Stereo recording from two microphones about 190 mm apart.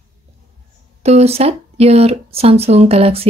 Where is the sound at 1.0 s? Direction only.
35° right (ahead or behind).